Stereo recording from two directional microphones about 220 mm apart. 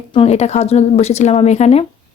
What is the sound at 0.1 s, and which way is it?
A woman's voice, 25° left (ahead or behind).